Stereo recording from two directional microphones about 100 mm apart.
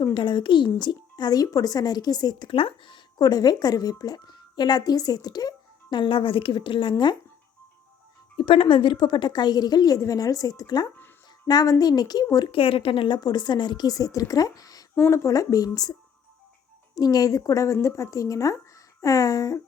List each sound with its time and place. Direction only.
0.1 s speech: 50° left (ahead or behind)
2.5 s speech: 60° left (ahead or behind)
8.4 s speech: 60° left (ahead or behind); by 12.5 s 40° left (ahead or behind)
12.5 s speech: 65° left (ahead or behind)
13.1 s speech: 45° left (ahead or behind)
14.9 s speech: 25° left (ahead or behind)